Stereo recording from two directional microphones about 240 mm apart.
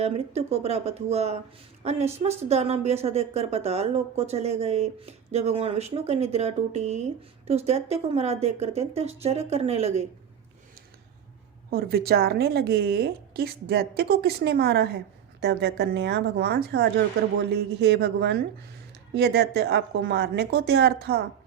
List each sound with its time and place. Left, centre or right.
0.0 s a woman's voice: right
11.7 s a woman's voice: right